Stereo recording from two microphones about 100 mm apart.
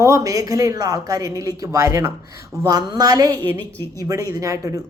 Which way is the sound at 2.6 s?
40° right (ahead or behind).